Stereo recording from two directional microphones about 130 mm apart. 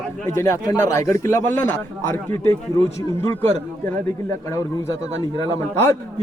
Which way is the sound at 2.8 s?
50° right (ahead or behind).